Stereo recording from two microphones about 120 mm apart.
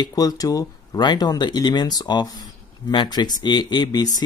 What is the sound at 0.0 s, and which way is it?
Speech, 30° left (ahead or behind).